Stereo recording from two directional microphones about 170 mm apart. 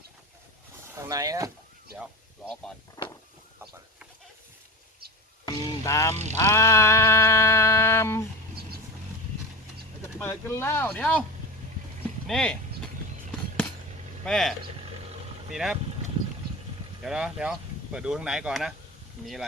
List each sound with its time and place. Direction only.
0.9 s speech: 20° right (ahead or behind)
3.0 s a sound: 25° left (ahead or behind)
5.5 s speech: 20° left (ahead or behind)
6.4 s sheep: 15° left (ahead or behind)
10.2 s speech: 15° left (ahead or behind)
12.3 s vehicle: 5° left (ahead or behind)
14.3 s speech: centre (ahead or behind)
15.5 s speech: centre (ahead or behind)
17.0 s speech: 5° right (ahead or behind)